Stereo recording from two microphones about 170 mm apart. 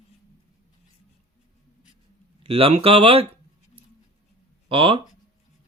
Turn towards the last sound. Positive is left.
turn(degrees=-30)  # may be behind; listen again after turning